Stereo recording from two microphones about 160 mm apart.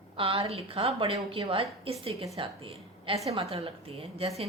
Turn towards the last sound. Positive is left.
turn(degrees=-40)  # may be behind; listen again after turning